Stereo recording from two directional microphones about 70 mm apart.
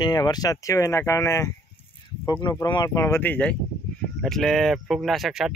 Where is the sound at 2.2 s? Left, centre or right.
Left.